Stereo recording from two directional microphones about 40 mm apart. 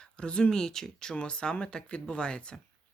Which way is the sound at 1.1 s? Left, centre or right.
Left.